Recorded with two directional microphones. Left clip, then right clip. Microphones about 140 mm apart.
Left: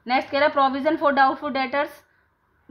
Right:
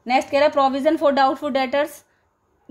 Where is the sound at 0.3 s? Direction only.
20° right (ahead or behind).